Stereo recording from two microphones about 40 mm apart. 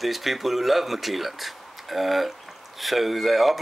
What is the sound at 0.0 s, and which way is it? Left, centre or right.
Speech, centre.